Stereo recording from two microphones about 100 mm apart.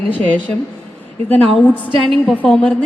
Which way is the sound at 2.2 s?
15° left (ahead or behind).